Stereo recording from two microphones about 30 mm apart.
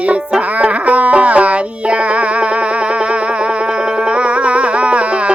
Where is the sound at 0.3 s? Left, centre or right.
Right.